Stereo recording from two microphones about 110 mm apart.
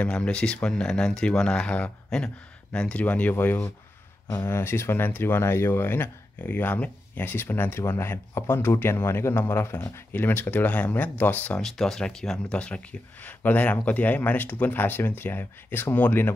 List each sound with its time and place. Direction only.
0.0 s speech: 10° left (ahead or behind)
11.6 s speech: 5° left (ahead or behind); by 16.3 s 20° left (ahead or behind)